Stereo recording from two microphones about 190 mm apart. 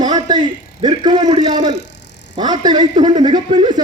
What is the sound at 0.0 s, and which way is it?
A man's voice, 20° right (ahead or behind).